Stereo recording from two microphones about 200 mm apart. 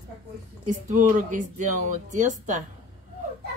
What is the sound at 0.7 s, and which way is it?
Speech, 40° right (ahead or behind).